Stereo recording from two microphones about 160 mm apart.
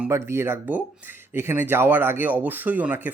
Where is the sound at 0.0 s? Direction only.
15° right (ahead or behind).